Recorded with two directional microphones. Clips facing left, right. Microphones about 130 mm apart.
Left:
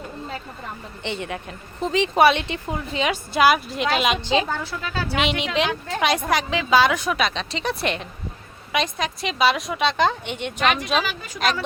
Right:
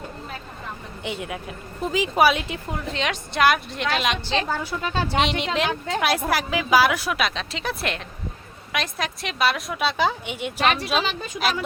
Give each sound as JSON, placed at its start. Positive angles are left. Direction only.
{"t": 1.0, "sound": "speech", "side_deg": -5}
{"t": 4.2, "sound": "a woman's voice", "side_deg": 15}
{"t": 4.4, "sound": "a woman's voice", "side_deg": -15}
{"t": 5.2, "sound": "speech", "side_deg": 0}
{"t": 10.6, "sound": "speech", "side_deg": -30}